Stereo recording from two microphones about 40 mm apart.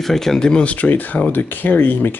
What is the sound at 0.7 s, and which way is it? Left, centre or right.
Speech, left.